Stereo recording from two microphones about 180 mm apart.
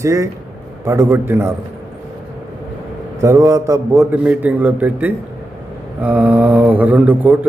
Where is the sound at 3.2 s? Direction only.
20° right (ahead or behind).